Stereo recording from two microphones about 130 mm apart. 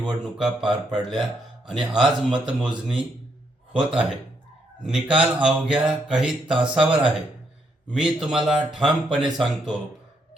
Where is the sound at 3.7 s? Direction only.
40° right (ahead or behind).